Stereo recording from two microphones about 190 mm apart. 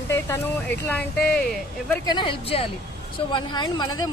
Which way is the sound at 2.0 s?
25° left (ahead or behind).